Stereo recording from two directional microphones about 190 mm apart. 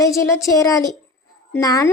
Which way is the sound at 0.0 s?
15° left (ahead or behind).